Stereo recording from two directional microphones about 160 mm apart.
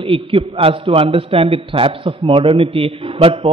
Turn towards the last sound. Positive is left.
turn(degrees=-35)  # may be behind; listen again after turning